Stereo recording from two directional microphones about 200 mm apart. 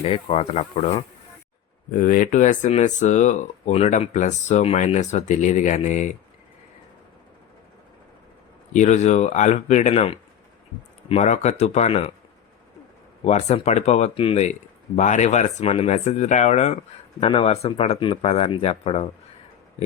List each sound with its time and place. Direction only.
0.0 s speech: 30° left (ahead or behind)
1.9 s speech: 45° left (ahead or behind)
8.7 s speech: 35° left (ahead or behind)
13.2 s speech: 30° left (ahead or behind)